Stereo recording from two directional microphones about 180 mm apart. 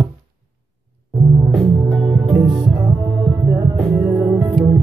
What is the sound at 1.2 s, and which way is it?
Music, 15° right (ahead or behind).